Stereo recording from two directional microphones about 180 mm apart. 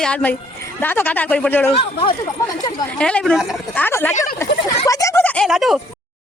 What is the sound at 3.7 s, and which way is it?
Speech, 10° left (ahead or behind).